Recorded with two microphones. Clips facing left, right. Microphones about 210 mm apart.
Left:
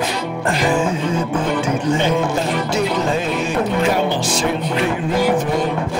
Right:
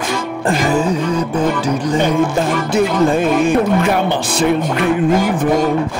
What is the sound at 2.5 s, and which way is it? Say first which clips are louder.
Music: right 4 dB; 50° right (ahead or behind).